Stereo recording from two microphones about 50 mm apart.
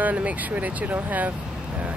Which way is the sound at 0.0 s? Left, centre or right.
Right.